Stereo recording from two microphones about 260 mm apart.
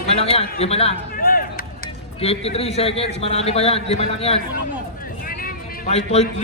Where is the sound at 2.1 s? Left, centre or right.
Left.